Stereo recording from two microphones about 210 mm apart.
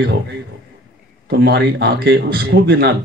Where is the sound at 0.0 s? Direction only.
50° right (ahead or behind).